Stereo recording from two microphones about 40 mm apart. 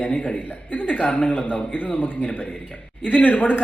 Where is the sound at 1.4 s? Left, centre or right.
Left.